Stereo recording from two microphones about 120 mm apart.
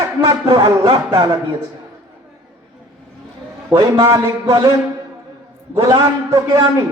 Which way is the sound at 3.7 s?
25° right (ahead or behind).